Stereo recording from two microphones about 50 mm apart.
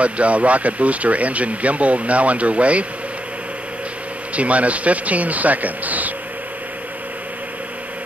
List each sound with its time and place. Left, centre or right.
0.0 s speech: right
4.4 s speech: right